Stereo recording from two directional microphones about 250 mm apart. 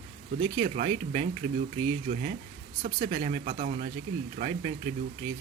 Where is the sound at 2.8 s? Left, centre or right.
Right.